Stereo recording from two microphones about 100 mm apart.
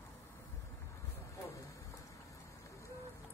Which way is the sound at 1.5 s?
30° left (ahead or behind).